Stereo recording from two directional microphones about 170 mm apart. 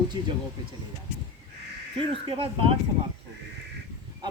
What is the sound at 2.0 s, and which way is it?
Speech, 35° right (ahead or behind).